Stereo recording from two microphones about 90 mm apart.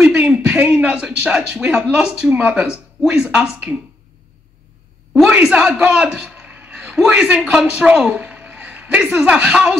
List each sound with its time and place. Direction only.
0.0 s a sound: 15° right (ahead or behind)
0.3 s speech: 15° right (ahead or behind)
5.4 s a man's voice: 10° right (ahead or behind)